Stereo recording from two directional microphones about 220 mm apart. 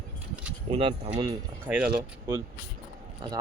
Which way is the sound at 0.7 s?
25° right (ahead or behind).